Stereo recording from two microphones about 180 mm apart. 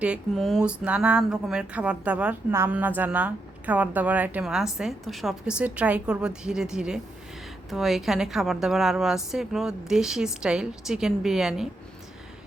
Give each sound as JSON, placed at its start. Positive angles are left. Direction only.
{"t": 0.0, "sound": "speech", "side_deg": -5}